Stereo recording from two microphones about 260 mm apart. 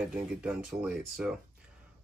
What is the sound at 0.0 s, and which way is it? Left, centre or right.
Speech, centre.